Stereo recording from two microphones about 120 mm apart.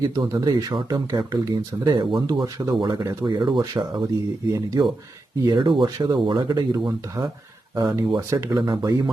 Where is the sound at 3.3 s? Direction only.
40° right (ahead or behind).